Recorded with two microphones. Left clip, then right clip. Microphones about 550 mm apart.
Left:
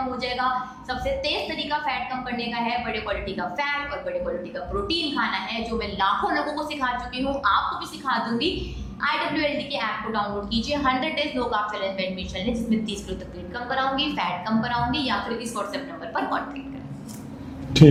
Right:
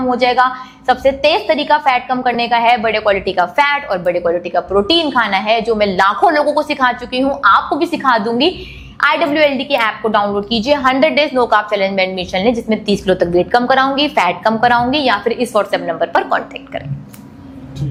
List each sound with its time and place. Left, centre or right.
0.2 s a woman's voice: right